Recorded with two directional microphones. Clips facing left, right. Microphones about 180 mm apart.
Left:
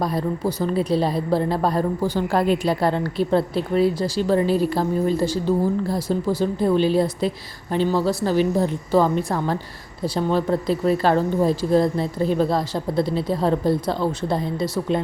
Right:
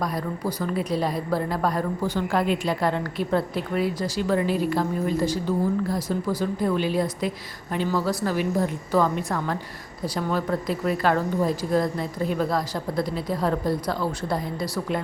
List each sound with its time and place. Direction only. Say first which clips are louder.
0.0 s a woman's voice: left 5 dB; 30° left (ahead or behind)